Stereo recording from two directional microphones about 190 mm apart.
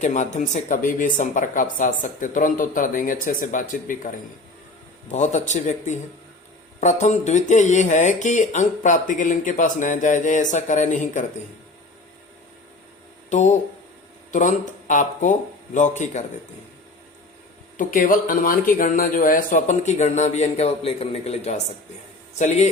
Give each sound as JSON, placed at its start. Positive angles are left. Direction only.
{"t": 0.0, "sound": "a man's voice", "side_deg": 40}
{"t": 13.3, "sound": "a man's voice", "side_deg": 40}
{"t": 17.7, "sound": "a man's voice", "side_deg": 45}